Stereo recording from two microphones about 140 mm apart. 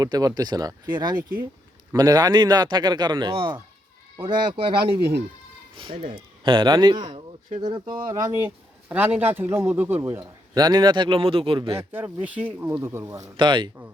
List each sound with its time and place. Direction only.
0.0 s a man's voice: 25° right (ahead or behind)
6.4 s a man's voice: 35° right (ahead or behind)
8.1 s a man's voice: 15° right (ahead or behind); by 11.7 s 40° right (ahead or behind)
11.7 s speech: 15° right (ahead or behind)
13.3 s a man's voice: 35° right (ahead or behind)